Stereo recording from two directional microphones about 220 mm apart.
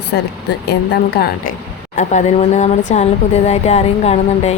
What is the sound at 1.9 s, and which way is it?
Speech, 35° left (ahead or behind).